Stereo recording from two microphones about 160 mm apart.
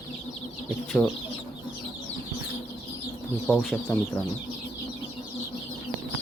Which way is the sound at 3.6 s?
Centre (ahead or behind).